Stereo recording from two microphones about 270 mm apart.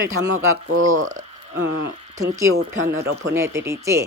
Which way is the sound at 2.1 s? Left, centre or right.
Centre.